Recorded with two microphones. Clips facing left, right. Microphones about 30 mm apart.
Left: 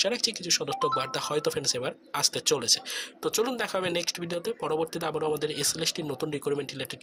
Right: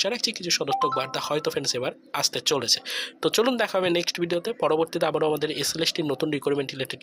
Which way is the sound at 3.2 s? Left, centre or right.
Right.